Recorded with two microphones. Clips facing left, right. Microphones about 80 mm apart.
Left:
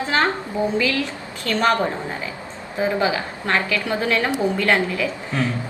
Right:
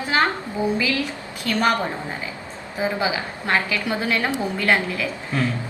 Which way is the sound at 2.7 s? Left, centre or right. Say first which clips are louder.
Left 3 dB; centre.